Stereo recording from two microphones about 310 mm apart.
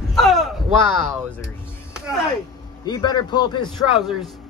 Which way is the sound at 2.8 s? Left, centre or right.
Centre.